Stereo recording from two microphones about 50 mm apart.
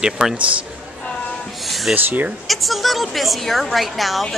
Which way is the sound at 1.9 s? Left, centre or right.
Right.